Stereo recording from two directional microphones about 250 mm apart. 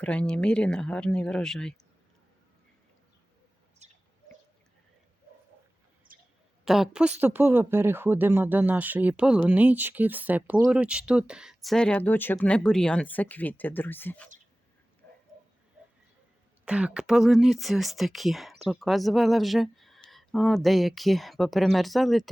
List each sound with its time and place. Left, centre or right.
0.0 s speech: centre
3.8 s bird: right
6.1 s a sound: right
6.7 s speech: centre
16.6 s speech: centre